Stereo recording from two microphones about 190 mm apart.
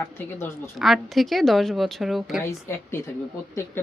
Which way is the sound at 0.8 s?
Centre (ahead or behind).